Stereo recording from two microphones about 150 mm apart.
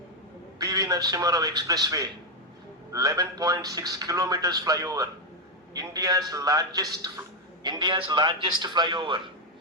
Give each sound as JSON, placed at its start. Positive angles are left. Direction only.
{"t": 0.6, "sound": "a man's voice", "side_deg": -25}